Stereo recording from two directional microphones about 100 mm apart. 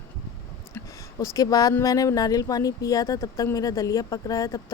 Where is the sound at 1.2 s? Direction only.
35° left (ahead or behind).